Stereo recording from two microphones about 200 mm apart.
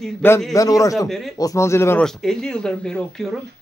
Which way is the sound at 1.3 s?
15° left (ahead or behind).